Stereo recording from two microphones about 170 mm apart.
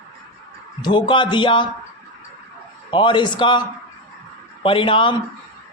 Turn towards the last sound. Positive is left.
turn(degrees=30)  # may be behind; listen again after turning